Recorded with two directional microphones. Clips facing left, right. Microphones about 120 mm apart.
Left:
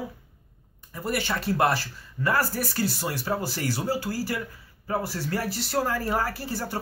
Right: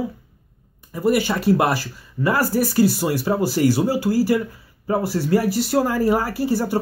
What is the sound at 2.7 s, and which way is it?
Speech, 10° right (ahead or behind).